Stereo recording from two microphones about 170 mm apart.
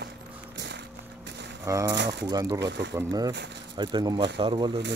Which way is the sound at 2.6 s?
90° right.